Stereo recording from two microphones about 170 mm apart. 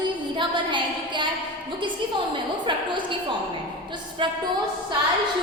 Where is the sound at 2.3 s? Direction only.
30° right (ahead or behind).